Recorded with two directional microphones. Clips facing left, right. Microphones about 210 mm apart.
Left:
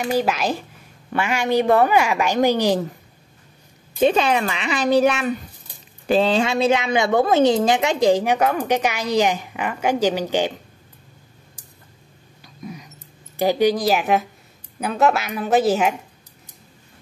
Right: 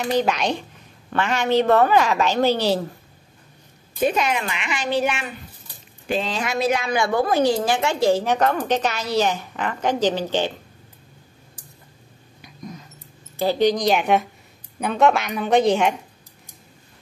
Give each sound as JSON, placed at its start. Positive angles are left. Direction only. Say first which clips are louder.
{"t": 0.0, "sound": "a woman's voice", "louder": "even", "side_deg": 5}
{"t": 4.0, "sound": "a woman's voice", "louder": "left 4 dB", "side_deg": 30}
{"t": 12.6, "sound": "mouse", "louder": "left 2 dB", "side_deg": 10}
{"t": 13.4, "sound": "a woman's voice", "louder": "left 1 dB", "side_deg": 10}